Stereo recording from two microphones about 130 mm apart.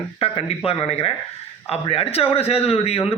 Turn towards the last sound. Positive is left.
turn(degrees=50)  # may be behind; listen again after turning